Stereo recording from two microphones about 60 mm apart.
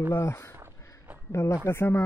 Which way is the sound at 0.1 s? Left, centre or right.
Left.